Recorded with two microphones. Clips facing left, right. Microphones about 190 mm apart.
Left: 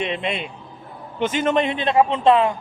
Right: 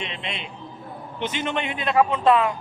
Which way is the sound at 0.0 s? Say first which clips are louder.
Left 8 dB; 55° left (ahead or behind).